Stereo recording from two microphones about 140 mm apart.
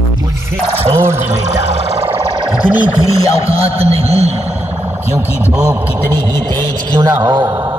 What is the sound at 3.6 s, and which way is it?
Speech, 45° right (ahead or behind).